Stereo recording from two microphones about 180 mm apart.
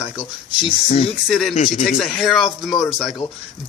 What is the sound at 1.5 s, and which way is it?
Speech, 35° left (ahead or behind).